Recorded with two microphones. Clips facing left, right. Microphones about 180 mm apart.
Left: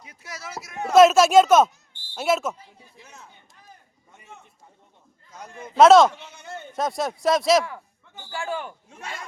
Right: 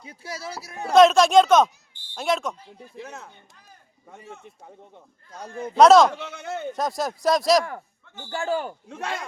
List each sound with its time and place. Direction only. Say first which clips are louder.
0.0 s speech: right 5 dB; 30° right (ahead or behind)
0.9 s speech: left 1 dB; 5° left (ahead or behind)
3.0 s a man's voice: right 11 dB; 70° right (ahead or behind)
5.3 s speech: right 7 dB; 30° right (ahead or behind)
5.7 s speech: left 1 dB; centre (ahead or behind)
6.1 s a man's voice: right 5 dB; 70° right (ahead or behind)
6.7 s speech: left 4 dB; centre (ahead or behind)
8.3 s speech: right 4 dB; 40° right (ahead or behind)
8.9 s speech: right 7 dB; 80° right